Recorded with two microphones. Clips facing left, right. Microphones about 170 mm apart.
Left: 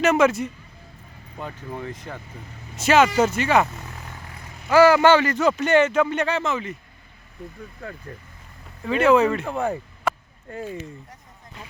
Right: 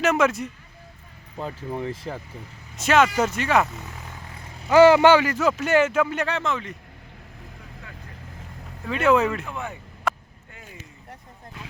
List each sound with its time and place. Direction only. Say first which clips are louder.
0.0 s speech: left 3 dB; centre (ahead or behind)
1.4 s speech: right 3 dB; 30° right (ahead or behind)
2.7 s speech: left 2 dB; centre (ahead or behind)
4.7 s speech: right 1 dB; 20° right (ahead or behind)
5.1 s speech: left 1 dB; 5° right (ahead or behind)
8.9 s speech: left 3 dB; centre (ahead or behind)
9.4 s speech: left 8 dB; 40° left (ahead or behind)
10.1 s a sound: left 2 dB; centre (ahead or behind)
10.5 s speech: left 16 dB; 40° left (ahead or behind)